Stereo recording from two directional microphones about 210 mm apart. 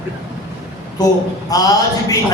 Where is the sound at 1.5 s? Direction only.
15° left (ahead or behind).